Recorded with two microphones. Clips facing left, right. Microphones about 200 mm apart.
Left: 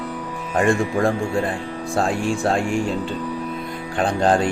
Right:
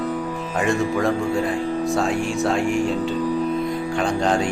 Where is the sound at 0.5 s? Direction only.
50° left (ahead or behind).